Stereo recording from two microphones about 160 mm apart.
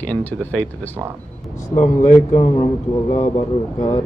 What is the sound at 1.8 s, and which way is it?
A man's voice, 45° left (ahead or behind).